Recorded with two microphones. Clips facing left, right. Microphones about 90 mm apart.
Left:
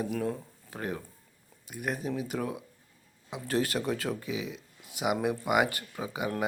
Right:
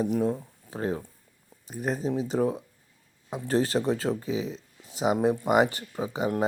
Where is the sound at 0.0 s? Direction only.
20° right (ahead or behind).